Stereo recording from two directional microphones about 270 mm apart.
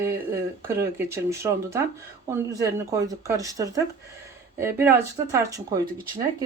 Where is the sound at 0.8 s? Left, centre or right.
Centre.